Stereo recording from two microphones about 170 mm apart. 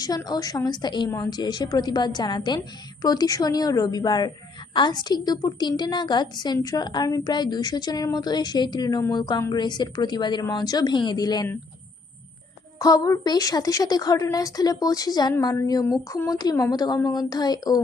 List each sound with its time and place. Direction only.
0.0 s a woman's voice: 20° left (ahead or behind)
12.8 s a woman's voice: 20° left (ahead or behind)